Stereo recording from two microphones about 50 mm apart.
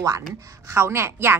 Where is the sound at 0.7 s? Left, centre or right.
Right.